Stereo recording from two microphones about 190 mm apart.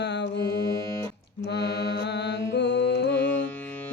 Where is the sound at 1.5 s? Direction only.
65° left (ahead or behind).